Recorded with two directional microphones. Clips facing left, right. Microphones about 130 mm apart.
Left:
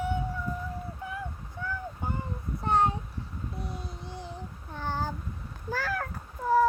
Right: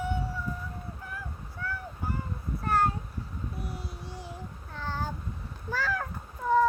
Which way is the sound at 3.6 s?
20° left (ahead or behind).